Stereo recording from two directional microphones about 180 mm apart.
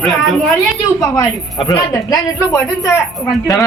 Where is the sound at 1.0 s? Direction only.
20° left (ahead or behind).